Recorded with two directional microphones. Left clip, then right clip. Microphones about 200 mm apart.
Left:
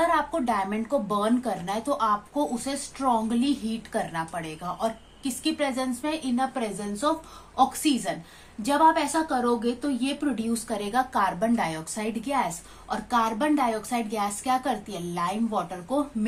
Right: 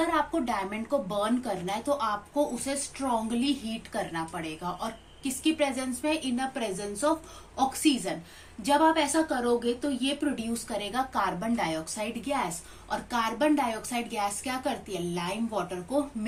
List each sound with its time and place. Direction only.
0.0 s a woman's voice: 30° left (ahead or behind)